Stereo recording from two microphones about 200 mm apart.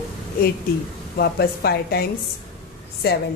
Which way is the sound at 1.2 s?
50° left (ahead or behind).